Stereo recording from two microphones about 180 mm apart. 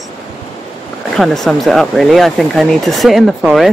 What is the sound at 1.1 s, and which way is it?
Speech, centre (ahead or behind).